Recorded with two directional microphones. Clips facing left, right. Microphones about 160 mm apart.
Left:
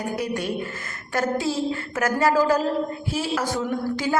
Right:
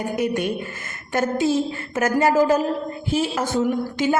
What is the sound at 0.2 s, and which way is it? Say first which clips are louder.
A woman's voice: right 4 dB; 20° right (ahead or behind).